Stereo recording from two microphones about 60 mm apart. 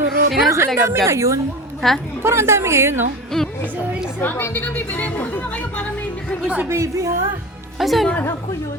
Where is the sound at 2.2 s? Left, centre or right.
Right.